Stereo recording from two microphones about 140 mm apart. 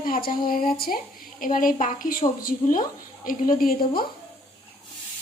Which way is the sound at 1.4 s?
75° left (ahead or behind).